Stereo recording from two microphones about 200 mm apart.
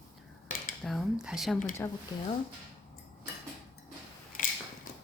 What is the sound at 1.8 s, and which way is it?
Speech, 10° left (ahead or behind).